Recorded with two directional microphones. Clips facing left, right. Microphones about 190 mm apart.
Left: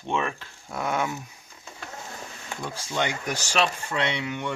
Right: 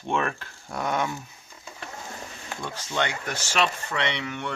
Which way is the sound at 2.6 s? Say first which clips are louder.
Even; 10° left (ahead or behind).